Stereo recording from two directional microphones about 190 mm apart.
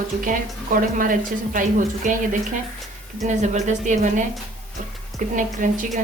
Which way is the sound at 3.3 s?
40° right (ahead or behind).